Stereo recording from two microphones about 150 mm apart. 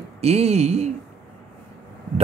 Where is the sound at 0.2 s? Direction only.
45° right (ahead or behind).